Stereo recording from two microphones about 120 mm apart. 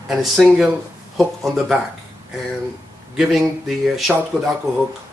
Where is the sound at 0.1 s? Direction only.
Centre (ahead or behind).